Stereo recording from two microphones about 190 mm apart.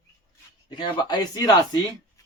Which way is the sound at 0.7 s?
20° left (ahead or behind).